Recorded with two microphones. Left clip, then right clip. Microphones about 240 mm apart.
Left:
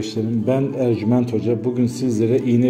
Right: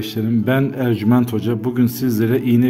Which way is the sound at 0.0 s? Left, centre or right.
Right.